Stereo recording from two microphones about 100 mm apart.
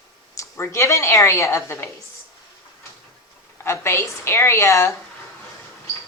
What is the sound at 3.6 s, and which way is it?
Speech, 25° left (ahead or behind).